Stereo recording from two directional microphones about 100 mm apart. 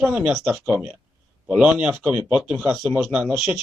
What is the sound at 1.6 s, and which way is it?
Speech, 10° right (ahead or behind).